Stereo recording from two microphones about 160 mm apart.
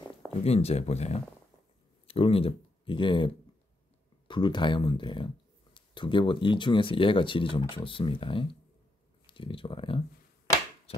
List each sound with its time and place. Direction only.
0.4 s speech: 40° left (ahead or behind)
4.3 s speech: 30° left (ahead or behind)
10.9 s dog: 40° left (ahead or behind)